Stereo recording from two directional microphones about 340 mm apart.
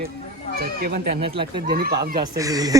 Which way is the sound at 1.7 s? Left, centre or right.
Right.